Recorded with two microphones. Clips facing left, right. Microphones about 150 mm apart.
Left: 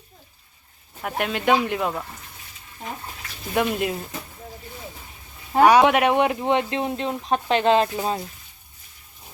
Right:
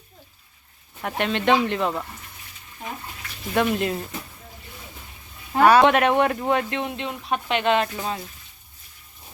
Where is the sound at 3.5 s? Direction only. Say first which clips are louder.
Right 1 dB; 10° left (ahead or behind).